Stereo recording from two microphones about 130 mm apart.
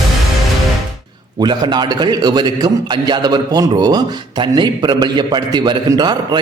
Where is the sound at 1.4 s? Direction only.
35° right (ahead or behind).